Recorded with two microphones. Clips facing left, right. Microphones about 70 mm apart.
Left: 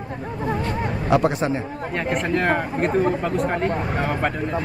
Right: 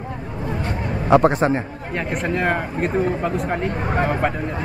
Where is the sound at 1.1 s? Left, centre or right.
Right.